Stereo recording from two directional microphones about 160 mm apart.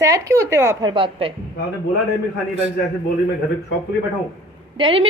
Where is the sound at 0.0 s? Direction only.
20° right (ahead or behind).